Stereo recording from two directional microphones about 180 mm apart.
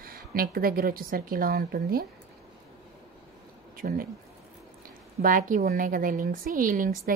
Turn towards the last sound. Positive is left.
turn(degrees=-50)  # may be behind; listen again after turning